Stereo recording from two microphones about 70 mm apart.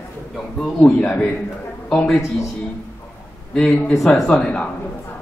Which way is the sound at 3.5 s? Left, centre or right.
Centre.